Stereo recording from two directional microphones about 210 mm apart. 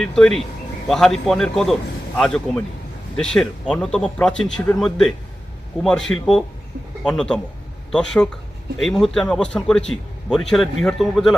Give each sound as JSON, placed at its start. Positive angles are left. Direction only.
{"t": 0.0, "sound": "a man's voice", "side_deg": 5}